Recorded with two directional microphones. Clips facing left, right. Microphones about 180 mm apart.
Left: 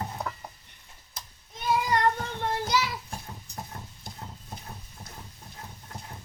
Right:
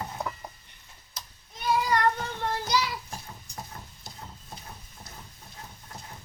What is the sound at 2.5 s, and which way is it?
Child singing, 20° left (ahead or behind).